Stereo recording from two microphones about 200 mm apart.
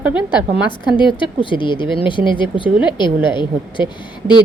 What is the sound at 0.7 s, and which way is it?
A woman's voice, 25° left (ahead or behind).